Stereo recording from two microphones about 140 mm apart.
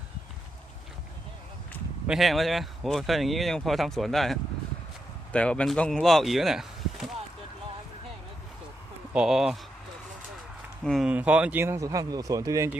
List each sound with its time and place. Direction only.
2.0 s speech: centre (ahead or behind)
9.1 s speech: 5° right (ahead or behind)
10.8 s speech: centre (ahead or behind)
11.1 s speech: 10° right (ahead or behind)
11.6 s speech: 20° right (ahead or behind)